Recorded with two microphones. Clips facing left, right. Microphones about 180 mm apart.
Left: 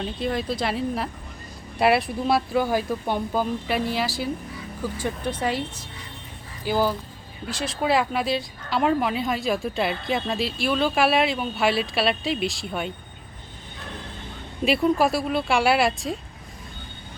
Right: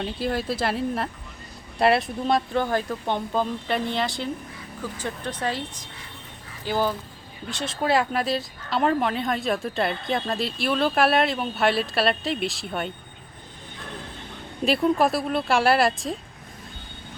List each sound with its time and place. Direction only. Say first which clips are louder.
0.0 s speech: even; 5° right (ahead or behind)
6.7 s speech: left 2 dB; 10° left (ahead or behind)
14.6 s speech: even; centre (ahead or behind)